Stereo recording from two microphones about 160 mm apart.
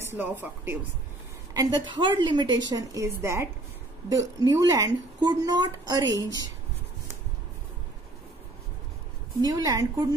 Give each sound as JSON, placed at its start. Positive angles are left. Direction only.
{"t": 0.0, "sound": "speech", "side_deg": -15}
{"t": 1.5, "sound": "speech", "side_deg": -25}
{"t": 9.4, "sound": "speech", "side_deg": -25}